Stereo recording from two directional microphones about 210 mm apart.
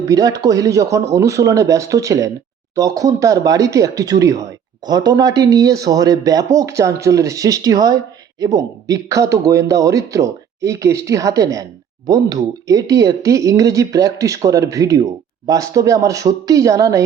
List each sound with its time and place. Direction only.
0.0 s speech: 15° right (ahead or behind)